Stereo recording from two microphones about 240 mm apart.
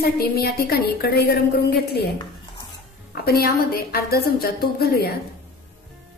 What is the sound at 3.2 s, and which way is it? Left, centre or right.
A woman's voice, left.